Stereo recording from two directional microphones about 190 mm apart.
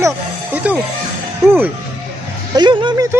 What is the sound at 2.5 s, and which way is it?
Speech, 25° right (ahead or behind).